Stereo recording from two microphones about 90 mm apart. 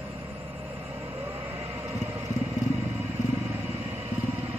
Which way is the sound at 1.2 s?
20° right (ahead or behind).